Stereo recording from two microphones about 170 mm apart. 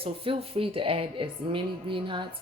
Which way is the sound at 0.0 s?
35° right (ahead or behind).